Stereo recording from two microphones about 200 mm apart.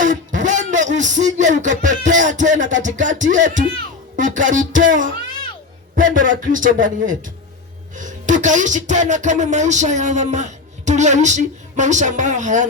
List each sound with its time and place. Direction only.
0.0 s speech: 40° right (ahead or behind)